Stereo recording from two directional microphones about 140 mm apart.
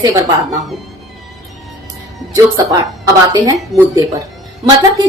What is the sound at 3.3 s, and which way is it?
Speech, 25° right (ahead or behind).